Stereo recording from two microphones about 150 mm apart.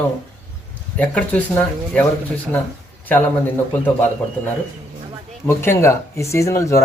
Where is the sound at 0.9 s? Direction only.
10° left (ahead or behind).